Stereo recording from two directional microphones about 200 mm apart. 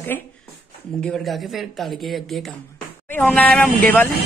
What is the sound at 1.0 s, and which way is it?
Speech, centre (ahead or behind).